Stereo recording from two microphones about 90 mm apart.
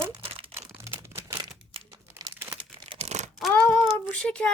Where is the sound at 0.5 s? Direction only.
30° right (ahead or behind).